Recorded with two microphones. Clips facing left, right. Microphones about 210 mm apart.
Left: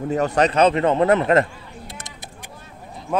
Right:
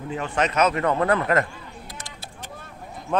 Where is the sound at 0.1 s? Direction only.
40° left (ahead or behind).